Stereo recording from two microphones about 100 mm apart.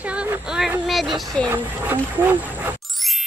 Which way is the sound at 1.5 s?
20° right (ahead or behind).